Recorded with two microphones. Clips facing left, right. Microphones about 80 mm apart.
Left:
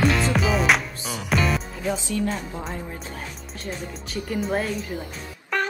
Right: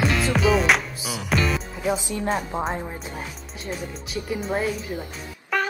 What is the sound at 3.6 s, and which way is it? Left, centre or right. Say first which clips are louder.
Speech: right 1 dB; centre.